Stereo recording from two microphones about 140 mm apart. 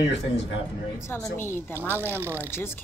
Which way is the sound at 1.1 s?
15° left (ahead or behind).